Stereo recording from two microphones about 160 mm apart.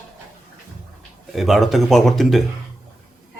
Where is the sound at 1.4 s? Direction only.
Centre (ahead or behind).